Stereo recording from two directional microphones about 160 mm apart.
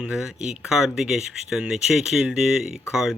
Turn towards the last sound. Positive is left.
turn(degrees=-5)  # may be behind; listen again after turning